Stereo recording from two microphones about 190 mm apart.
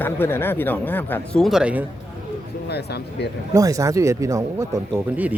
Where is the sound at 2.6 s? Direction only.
60° left (ahead or behind).